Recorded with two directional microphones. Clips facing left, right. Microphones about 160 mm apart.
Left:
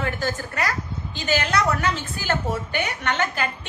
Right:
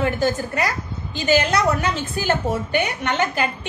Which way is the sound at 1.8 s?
15° right (ahead or behind).